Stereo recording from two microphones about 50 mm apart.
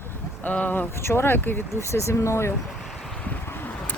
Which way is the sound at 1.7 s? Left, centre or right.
Left.